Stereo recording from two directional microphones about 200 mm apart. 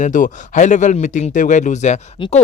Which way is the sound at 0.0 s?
40° left (ahead or behind).